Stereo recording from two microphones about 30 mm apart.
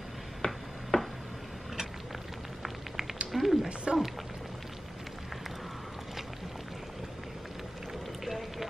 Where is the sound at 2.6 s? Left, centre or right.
Centre.